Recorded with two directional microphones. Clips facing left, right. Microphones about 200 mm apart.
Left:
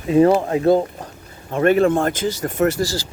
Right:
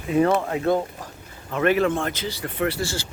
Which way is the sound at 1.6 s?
45° left (ahead or behind).